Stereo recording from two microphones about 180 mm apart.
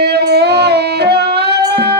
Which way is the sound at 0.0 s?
65° right (ahead or behind).